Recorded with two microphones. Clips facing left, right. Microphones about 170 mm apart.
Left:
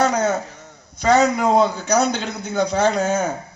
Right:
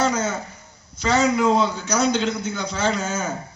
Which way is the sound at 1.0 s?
55° left (ahead or behind).